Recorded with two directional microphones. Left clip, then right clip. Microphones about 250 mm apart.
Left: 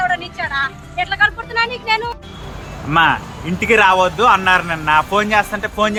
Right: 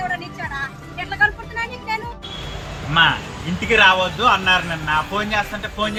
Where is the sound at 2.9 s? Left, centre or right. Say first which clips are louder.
Left 2 dB; centre.